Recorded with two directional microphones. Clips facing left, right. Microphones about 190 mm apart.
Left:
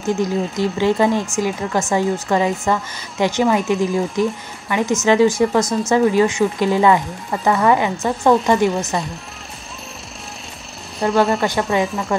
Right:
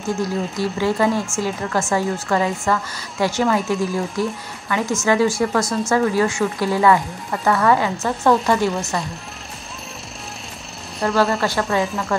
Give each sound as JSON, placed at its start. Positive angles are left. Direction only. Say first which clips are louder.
{"t": 0.0, "sound": "a woman's voice", "louder": "left 3 dB", "side_deg": 20}
{"t": 11.0, "sound": "a woman's voice", "louder": "left 2 dB", "side_deg": 20}
{"t": 11.8, "sound": "speech", "louder": "left 2 dB", "side_deg": 0}